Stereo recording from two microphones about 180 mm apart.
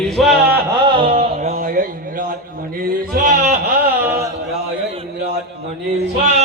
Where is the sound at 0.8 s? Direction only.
25° right (ahead or behind); by 3.5 s 45° right (ahead or behind).